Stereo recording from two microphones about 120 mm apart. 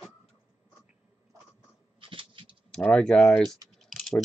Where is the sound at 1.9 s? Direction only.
45° right (ahead or behind).